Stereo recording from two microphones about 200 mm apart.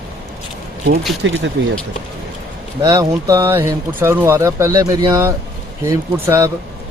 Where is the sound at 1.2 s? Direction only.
65° right (ahead or behind).